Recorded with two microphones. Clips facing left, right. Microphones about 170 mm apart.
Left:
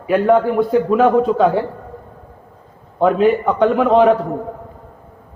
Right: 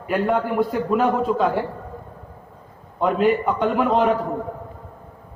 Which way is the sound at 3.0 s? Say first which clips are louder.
Left 5 dB; 85° left.